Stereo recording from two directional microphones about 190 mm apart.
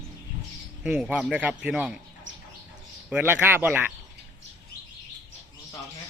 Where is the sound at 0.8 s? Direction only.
5° right (ahead or behind).